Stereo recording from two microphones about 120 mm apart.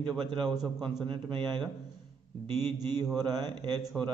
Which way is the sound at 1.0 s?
40° right (ahead or behind).